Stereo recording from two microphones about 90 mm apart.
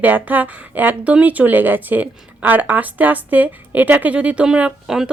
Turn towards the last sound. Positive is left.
turn(degrees=-10)  # may be behind; listen again after turning